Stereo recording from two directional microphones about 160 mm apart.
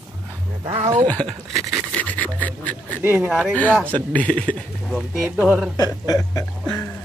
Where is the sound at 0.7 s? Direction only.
45° right (ahead or behind).